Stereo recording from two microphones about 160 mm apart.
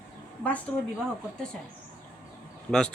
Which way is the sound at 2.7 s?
5° left (ahead or behind).